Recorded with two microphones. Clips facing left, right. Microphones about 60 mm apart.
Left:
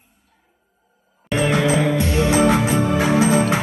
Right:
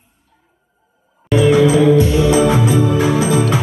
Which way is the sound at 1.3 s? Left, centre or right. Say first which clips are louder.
Right 7 dB; left.